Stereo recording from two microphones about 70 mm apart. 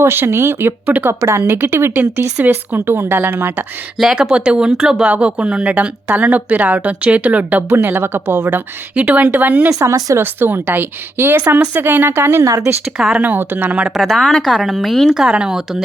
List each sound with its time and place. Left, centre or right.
0.0 s speech: right
4.0 s speech: centre
7.7 s speech: right
9.0 s speech: centre
9.6 s speech: right
10.2 s speech: right
11.4 s speech: centre
11.8 s speech: right
12.8 s speech: centre
13.2 s speech: right
13.8 s speech: centre